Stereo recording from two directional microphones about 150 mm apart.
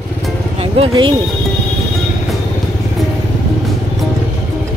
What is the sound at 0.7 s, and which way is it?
Speech, 40° right (ahead or behind).